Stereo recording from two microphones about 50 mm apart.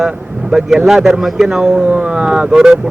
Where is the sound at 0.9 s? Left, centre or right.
Centre.